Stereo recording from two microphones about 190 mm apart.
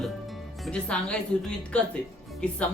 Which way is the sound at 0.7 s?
5° left (ahead or behind).